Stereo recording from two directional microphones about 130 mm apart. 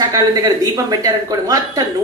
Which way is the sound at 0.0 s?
30° right (ahead or behind).